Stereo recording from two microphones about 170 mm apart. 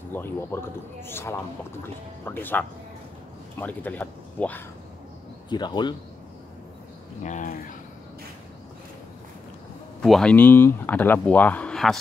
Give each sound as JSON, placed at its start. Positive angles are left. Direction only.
{"t": 0.1, "sound": "speech", "side_deg": 15}
{"t": 5.5, "sound": "speech", "side_deg": 25}
{"t": 7.2, "sound": "speech", "side_deg": 50}
{"t": 10.0, "sound": "speech", "side_deg": 5}